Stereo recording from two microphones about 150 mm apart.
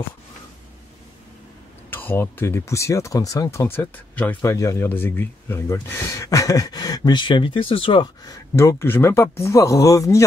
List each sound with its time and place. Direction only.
1.9 s speech: 15° left (ahead or behind); by 8.4 s 30° left (ahead or behind)
8.5 s speech: 20° left (ahead or behind)